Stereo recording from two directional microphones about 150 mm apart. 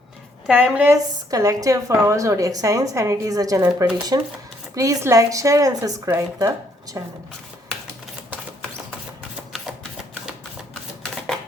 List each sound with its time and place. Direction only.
0.4 s a woman's voice: 10° right (ahead or behind)